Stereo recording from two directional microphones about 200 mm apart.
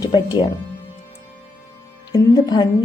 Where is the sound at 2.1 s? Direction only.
20° left (ahead or behind).